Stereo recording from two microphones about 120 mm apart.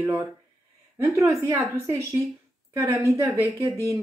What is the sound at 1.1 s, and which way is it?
A woman's voice, 25° right (ahead or behind).